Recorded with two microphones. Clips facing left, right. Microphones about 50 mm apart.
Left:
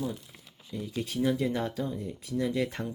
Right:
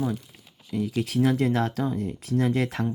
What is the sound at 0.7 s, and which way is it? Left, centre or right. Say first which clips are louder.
Speech: right 7 dB; right.